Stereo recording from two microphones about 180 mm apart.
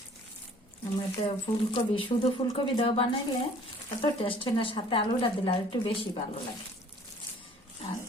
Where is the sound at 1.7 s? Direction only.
30° left (ahead or behind).